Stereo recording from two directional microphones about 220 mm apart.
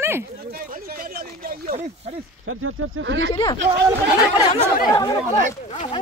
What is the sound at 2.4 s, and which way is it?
Speech, 70° right (ahead or behind).